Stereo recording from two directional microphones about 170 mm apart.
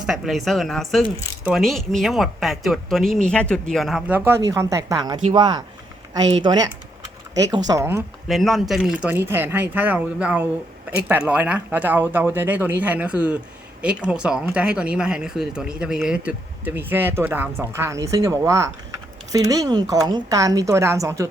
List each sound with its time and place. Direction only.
0.0 s speech: centre (ahead or behind)
1.0 s speech: 35° left (ahead or behind)
1.5 s speech: centre (ahead or behind)
4.4 s speech: 15° right (ahead or behind)
7.7 s speech: 15° right (ahead or behind)
8.3 s speech: centre (ahead or behind); by 21.2 s 15° right (ahead or behind)